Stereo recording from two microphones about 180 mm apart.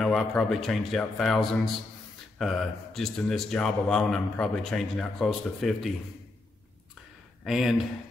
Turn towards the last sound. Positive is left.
turn(degrees=0)  # may be behind; listen again after turning